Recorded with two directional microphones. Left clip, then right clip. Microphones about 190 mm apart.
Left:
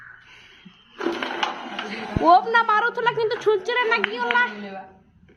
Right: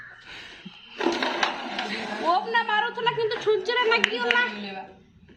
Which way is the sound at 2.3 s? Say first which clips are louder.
Left 7 dB; 45° left (ahead or behind).